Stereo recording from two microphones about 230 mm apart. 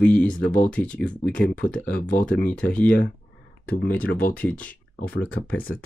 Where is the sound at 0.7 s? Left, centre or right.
Centre.